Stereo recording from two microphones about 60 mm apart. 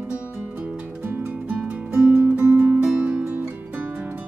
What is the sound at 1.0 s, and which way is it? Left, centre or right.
Music, right.